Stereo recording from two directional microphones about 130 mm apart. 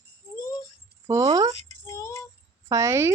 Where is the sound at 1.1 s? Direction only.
20° right (ahead or behind).